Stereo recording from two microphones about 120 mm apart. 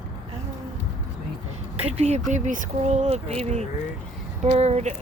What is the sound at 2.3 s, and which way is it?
Speech, 90° right.